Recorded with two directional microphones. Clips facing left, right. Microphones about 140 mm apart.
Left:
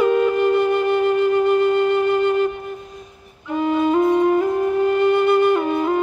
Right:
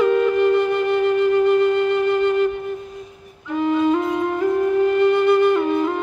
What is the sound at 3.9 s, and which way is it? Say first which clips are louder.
Flute: left 5 dB; 25° left (ahead or behind).